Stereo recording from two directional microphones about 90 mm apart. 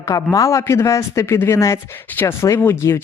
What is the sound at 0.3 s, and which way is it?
A man's voice, 35° left (ahead or behind).